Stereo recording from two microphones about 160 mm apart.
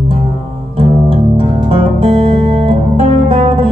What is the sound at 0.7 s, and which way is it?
Music, 35° right (ahead or behind).